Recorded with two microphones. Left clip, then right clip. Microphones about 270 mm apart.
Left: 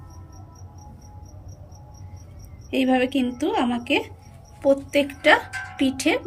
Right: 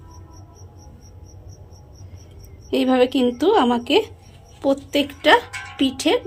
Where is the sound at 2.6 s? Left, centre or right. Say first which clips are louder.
Right 4 dB; right.